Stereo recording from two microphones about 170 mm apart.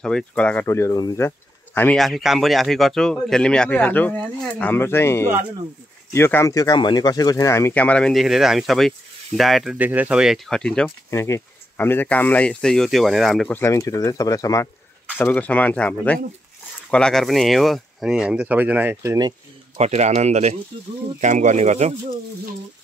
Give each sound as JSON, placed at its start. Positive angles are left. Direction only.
{"t": 0.0, "sound": "speech", "side_deg": 5}
{"t": 11.1, "sound": "speech", "side_deg": 15}
{"t": 13.5, "sound": "speech", "side_deg": 15}
{"t": 19.8, "sound": "speech", "side_deg": -40}